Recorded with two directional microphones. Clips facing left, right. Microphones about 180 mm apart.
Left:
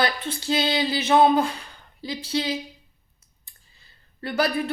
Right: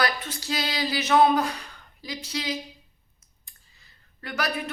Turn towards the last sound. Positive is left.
turn(degrees=30)  # may be behind; listen again after turning